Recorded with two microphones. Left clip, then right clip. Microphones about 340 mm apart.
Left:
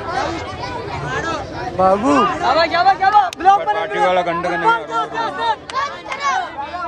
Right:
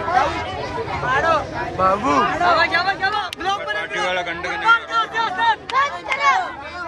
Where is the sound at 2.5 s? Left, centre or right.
Left.